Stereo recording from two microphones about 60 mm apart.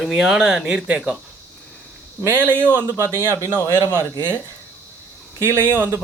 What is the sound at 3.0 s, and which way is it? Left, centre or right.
Speech, right.